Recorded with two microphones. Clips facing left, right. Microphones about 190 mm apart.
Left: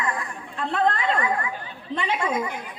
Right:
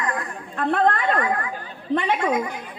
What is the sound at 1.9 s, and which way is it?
Speech, 50° right (ahead or behind).